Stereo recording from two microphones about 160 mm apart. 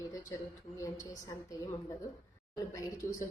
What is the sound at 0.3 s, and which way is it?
Speech, 20° left (ahead or behind).